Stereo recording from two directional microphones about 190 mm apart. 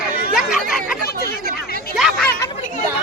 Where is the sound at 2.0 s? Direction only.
Centre (ahead or behind).